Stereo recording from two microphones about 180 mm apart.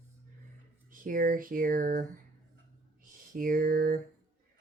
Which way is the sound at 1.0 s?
50° right (ahead or behind).